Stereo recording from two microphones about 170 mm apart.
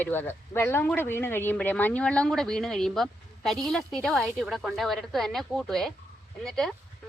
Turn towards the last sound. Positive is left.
turn(degrees=0)  # may be behind; listen again after turning